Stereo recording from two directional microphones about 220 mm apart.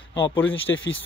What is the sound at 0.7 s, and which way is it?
Speech, 60° left (ahead or behind).